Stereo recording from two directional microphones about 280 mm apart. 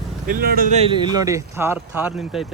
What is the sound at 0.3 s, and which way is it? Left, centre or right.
Speech, right.